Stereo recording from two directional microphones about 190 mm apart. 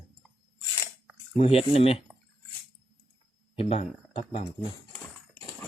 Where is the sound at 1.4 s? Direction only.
30° left (ahead or behind).